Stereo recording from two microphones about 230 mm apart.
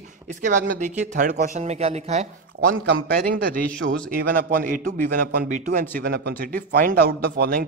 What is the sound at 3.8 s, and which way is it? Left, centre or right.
Speech, right.